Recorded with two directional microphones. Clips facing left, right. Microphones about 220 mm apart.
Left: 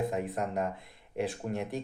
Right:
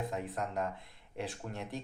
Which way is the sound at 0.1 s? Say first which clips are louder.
Left 5 dB; 15° left (ahead or behind).